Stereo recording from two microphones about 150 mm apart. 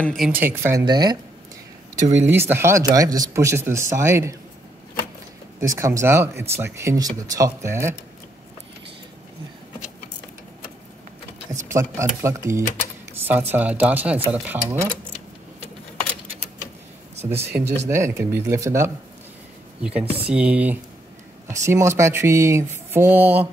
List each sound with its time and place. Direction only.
0.0 s speech: 5° left (ahead or behind)
0.3 s speech: 15° right (ahead or behind)
0.8 s speech: 25° right (ahead or behind)
2.0 s speech: 15° right (ahead or behind)
5.6 s speech: 20° right (ahead or behind)
11.7 s speech: 20° right (ahead or behind)
17.8 s speech: 20° right (ahead or behind)
19.8 s speech: 5° right (ahead or behind)